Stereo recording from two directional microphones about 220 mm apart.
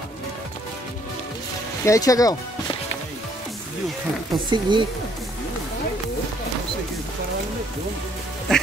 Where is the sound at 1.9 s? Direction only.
15° left (ahead or behind).